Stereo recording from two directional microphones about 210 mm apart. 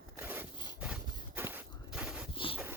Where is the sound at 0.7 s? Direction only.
5° right (ahead or behind).